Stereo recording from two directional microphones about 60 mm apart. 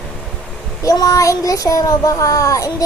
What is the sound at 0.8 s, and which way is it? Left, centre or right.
A child's voice, left.